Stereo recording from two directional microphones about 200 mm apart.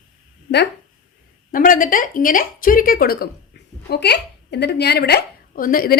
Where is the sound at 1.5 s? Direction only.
45° left (ahead or behind).